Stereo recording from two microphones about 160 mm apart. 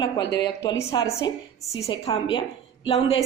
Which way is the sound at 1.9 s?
35° left (ahead or behind).